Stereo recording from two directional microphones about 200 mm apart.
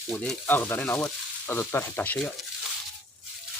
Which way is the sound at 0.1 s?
5° left (ahead or behind).